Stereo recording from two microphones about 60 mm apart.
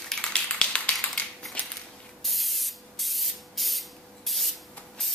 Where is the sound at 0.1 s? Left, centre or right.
Centre.